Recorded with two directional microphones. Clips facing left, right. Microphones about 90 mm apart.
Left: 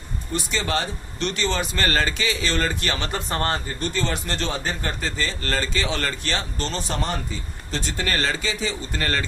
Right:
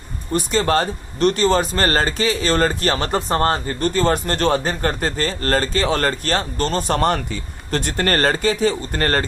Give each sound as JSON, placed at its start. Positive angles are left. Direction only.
{"t": 0.3, "sound": "speech", "side_deg": -45}